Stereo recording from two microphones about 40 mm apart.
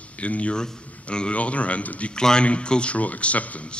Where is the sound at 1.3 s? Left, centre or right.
Left.